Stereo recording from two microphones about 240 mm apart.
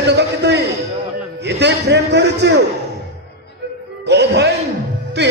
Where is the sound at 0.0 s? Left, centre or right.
Right.